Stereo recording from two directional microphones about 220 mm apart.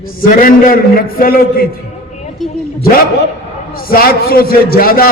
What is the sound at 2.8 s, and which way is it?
A man's voice, 40° left (ahead or behind).